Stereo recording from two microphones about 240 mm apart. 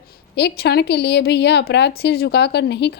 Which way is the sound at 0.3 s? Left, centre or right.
Left.